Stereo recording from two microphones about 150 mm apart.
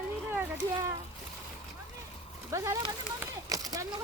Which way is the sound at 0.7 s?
20° right (ahead or behind).